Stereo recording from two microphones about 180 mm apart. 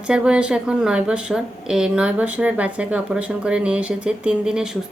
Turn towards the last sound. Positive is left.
turn(degrees=-5)  # may be behind; listen again after turning